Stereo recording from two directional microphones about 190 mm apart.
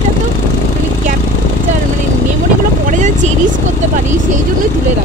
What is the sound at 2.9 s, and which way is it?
Speech, 40° right (ahead or behind).